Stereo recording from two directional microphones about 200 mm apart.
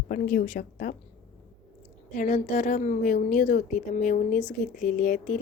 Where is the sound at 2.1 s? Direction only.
40° left (ahead or behind).